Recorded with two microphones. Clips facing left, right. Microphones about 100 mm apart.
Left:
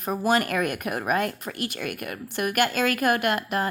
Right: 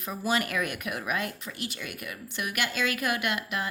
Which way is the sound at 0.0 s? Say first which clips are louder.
Left 6 dB; 50° left (ahead or behind).